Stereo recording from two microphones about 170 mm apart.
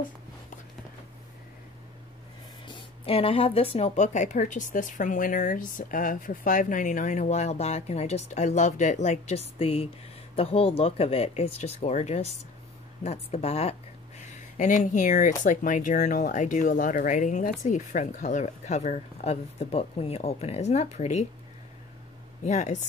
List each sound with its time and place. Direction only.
2.6 s speech: 30° left (ahead or behind)
14.6 s speech: 45° left (ahead or behind)
22.4 s speech: 45° left (ahead or behind)